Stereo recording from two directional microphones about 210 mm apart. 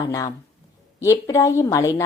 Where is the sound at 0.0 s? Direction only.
15° left (ahead or behind).